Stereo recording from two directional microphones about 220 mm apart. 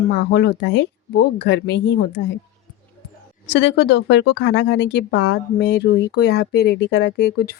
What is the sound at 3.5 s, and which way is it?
Speech, 50° left (ahead or behind).